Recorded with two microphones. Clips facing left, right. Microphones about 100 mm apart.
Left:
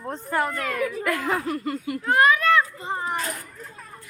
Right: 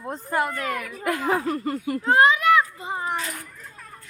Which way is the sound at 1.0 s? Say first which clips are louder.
Right 1 dB; 25° right (ahead or behind).